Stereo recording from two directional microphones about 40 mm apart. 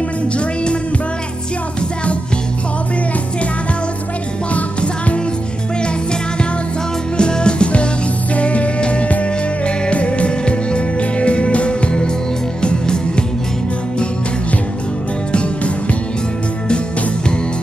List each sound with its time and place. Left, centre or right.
4.6 s music: left
7.2 s music: left
15.3 s music: left